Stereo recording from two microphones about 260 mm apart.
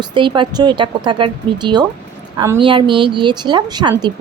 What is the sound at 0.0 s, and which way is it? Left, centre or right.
Speech, centre.